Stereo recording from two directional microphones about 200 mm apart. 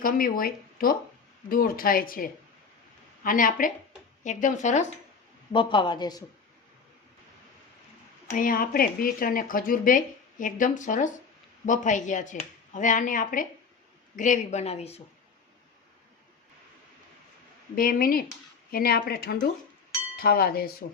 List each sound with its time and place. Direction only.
0.0 s speech: 45° left (ahead or behind)
5.5 s speech: 25° left (ahead or behind)
8.3 s speech: 45° left (ahead or behind)
17.7 s speech: 45° left (ahead or behind)